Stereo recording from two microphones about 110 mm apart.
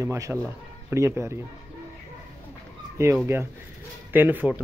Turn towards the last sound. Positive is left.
turn(degrees=-15)  # may be behind; listen again after turning